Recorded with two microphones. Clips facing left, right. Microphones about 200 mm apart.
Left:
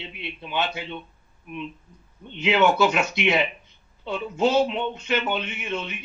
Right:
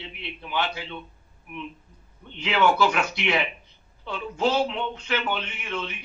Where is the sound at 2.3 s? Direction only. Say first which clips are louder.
Left 2 dB; 20° left (ahead or behind).